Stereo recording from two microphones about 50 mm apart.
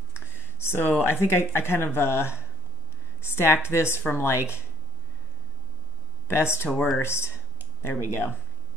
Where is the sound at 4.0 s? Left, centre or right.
Left.